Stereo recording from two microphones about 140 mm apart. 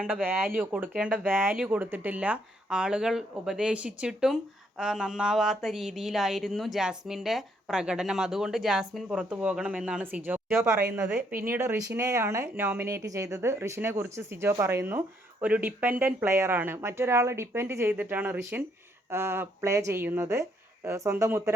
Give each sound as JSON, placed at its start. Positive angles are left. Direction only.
{"t": 0.0, "sound": "speech", "side_deg": -15}